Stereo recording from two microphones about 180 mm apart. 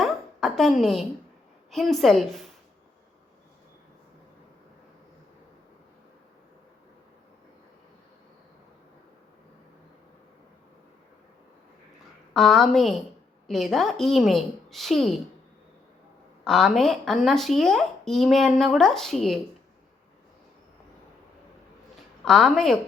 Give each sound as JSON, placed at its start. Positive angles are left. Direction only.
{"t": 0.0, "sound": "a sound", "side_deg": 0}
{"t": 1.7, "sound": "speech", "side_deg": 0}
{"t": 12.3, "sound": "speech", "side_deg": 0}
{"t": 16.4, "sound": "speech", "side_deg": 0}
{"t": 22.2, "sound": "speech", "side_deg": 0}